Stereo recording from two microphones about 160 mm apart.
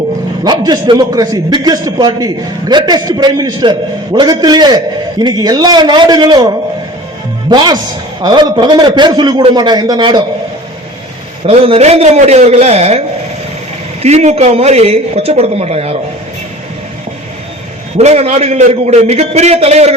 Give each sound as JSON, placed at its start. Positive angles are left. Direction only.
{"t": 0.4, "sound": "a man's voice", "side_deg": -25}
{"t": 7.5, "sound": "a man's voice", "side_deg": -25}
{"t": 11.4, "sound": "speech", "side_deg": -35}
{"t": 14.0, "sound": "speech", "side_deg": -45}
{"t": 17.9, "sound": "a man's voice", "side_deg": -45}